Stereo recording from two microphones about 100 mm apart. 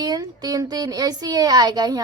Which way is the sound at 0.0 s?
40° right (ahead or behind).